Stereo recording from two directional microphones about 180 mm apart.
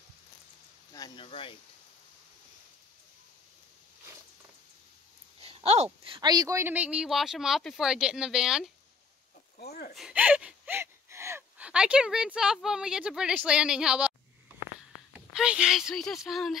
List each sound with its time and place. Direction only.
0.9 s speech: 25° left (ahead or behind)
5.4 s a sound: 35° right (ahead or behind)
6.0 s speech: 25° right (ahead or behind); by 8.6 s 5° right (ahead or behind)
9.6 s speech: 60° left (ahead or behind)
9.9 s speech: 5° right (ahead or behind)
15.1 s speech: 5° right (ahead or behind)